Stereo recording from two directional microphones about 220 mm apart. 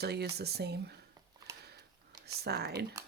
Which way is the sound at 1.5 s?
15° right (ahead or behind).